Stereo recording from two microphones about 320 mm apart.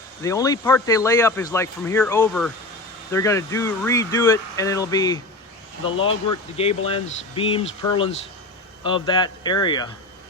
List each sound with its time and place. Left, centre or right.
0.2 s speech: centre
8.8 s speech: centre